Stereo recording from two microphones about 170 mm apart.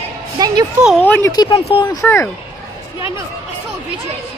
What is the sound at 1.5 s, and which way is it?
Speech, 30° left (ahead or behind).